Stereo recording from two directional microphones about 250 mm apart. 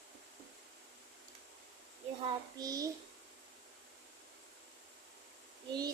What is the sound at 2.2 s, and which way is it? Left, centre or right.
Child singing, centre.